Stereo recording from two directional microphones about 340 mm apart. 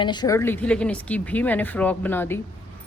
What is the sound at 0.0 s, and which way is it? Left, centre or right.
Speech, centre.